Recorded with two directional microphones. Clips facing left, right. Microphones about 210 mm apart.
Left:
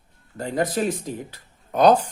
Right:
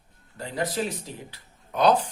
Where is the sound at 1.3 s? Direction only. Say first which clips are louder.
Left 4 dB; 45° left (ahead or behind).